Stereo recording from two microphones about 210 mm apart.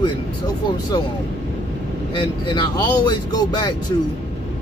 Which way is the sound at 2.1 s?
20° left (ahead or behind).